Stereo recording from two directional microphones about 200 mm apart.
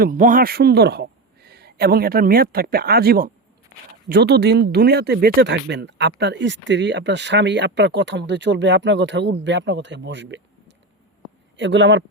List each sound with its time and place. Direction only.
0.0 s speech: 40° right (ahead or behind); by 12.0 s 65° right (ahead or behind)